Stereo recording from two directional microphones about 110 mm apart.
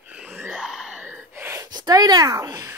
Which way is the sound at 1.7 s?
35° right (ahead or behind).